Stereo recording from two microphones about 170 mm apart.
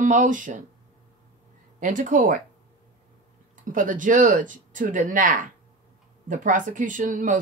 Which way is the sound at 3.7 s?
50° right (ahead or behind).